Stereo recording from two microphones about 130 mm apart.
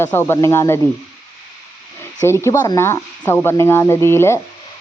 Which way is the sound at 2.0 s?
20° left (ahead or behind).